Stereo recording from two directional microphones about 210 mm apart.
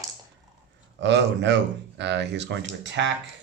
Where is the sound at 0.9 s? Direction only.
60° right (ahead or behind).